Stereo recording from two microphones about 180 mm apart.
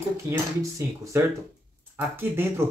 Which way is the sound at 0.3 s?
15° right (ahead or behind).